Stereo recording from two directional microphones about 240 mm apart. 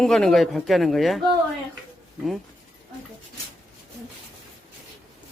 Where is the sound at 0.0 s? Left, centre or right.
Centre.